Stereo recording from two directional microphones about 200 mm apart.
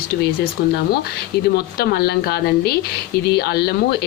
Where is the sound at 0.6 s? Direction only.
50° left (ahead or behind).